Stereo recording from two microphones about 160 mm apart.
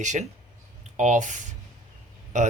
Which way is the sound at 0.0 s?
50° right (ahead or behind).